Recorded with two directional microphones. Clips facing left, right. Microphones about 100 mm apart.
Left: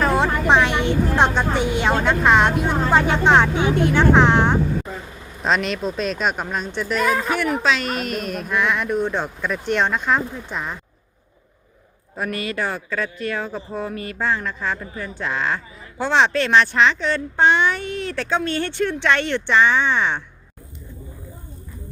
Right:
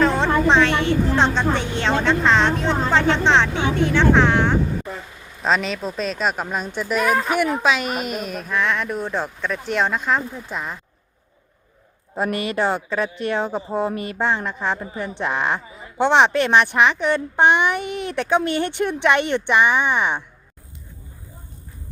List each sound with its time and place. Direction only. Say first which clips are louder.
0.0 s a woman's voice: right 1 dB; 10° left (ahead or behind)
5.4 s speech: even; centre (ahead or behind)
12.1 s speech: right 3 dB; 25° right (ahead or behind)